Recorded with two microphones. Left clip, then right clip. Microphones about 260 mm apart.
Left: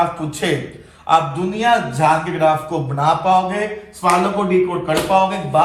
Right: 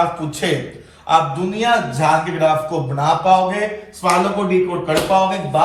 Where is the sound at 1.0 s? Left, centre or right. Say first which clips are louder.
Even; centre.